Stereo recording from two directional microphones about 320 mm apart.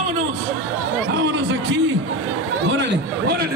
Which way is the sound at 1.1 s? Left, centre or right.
Right.